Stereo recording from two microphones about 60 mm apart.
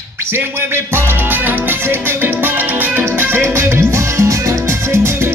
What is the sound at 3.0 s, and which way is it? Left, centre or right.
Music, right.